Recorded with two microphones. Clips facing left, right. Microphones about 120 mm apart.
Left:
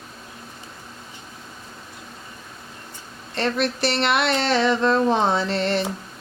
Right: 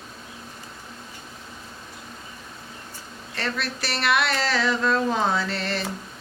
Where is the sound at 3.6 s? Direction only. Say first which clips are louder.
Left 4 dB; 25° left (ahead or behind).